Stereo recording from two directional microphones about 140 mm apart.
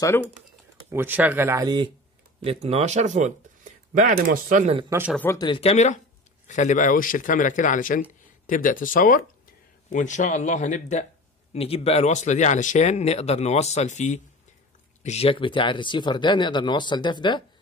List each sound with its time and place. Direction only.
0.0 s speech: 15° left (ahead or behind)
0.9 s speech: 15° right (ahead or behind)
2.4 s speech: 45° right (ahead or behind); by 4.6 s 80° right
4.9 s speech: 20° right (ahead or behind)
5.3 s speech: 30° left (ahead or behind)
5.6 s speech: 50° left (ahead or behind); by 9.2 s 75° left (ahead or behind)
9.8 s speech: 60° left (ahead or behind)
11.5 s speech: 45° left (ahead or behind)
15.0 s speech: 45° left (ahead or behind)